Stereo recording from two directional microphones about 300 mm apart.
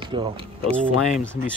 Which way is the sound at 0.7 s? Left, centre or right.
Centre.